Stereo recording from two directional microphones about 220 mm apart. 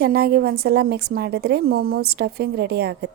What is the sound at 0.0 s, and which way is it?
A woman's voice, 45° right (ahead or behind).